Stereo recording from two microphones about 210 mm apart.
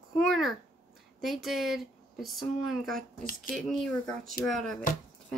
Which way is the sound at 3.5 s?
40° left (ahead or behind).